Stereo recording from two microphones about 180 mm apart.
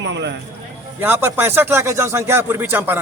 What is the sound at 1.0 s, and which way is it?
Speech, 10° right (ahead or behind).